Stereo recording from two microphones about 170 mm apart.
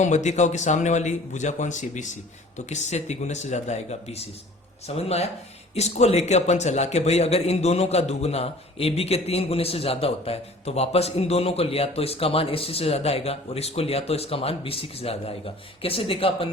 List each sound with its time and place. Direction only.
0.0 s a man's voice: 45° left (ahead or behind)